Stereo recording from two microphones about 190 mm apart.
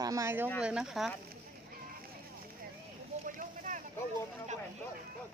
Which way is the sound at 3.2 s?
45° right (ahead or behind).